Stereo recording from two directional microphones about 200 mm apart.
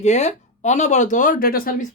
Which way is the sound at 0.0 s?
35° left (ahead or behind).